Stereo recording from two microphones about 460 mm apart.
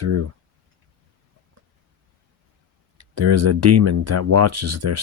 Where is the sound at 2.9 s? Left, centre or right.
Right.